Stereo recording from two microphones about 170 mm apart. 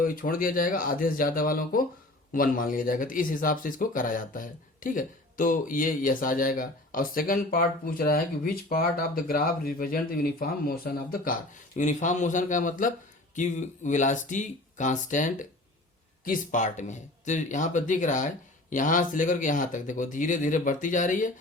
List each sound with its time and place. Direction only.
0.0 s speech: 55° left (ahead or behind)